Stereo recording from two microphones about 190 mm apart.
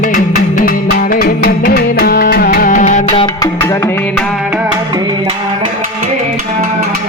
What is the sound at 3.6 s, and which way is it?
Music, 15° left (ahead or behind).